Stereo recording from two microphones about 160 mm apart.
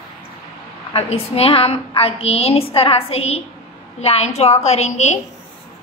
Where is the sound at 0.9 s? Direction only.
35° left (ahead or behind).